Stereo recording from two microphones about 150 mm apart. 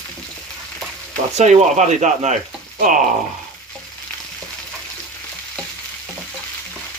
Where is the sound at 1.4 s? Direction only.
50° right (ahead or behind).